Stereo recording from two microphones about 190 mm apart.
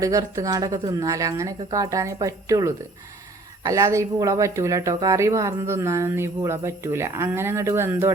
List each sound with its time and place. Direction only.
0.0 s speech: 15° right (ahead or behind)